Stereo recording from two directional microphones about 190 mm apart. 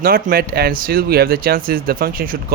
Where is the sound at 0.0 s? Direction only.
50° right (ahead or behind).